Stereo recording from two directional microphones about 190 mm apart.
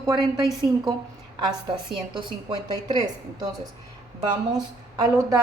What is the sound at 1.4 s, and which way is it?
A woman's voice, 25° right (ahead or behind).